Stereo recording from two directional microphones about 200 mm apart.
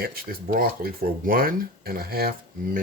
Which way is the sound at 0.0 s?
45° right (ahead or behind).